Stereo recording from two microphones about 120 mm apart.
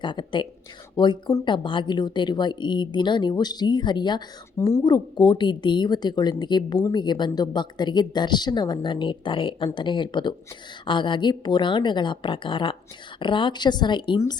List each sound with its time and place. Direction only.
0.0 s speech: 40° left (ahead or behind)
4.5 s speech: 25° left (ahead or behind)
4.8 s a woman's voice: 35° left (ahead or behind)